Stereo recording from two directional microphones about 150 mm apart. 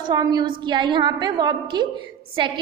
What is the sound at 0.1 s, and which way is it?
A woman's voice, 30° right (ahead or behind).